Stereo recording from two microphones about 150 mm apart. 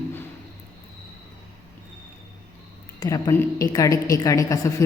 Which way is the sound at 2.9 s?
25° left (ahead or behind).